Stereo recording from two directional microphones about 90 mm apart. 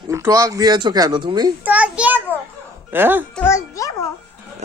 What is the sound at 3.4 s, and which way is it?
Speech, 35° left (ahead or behind).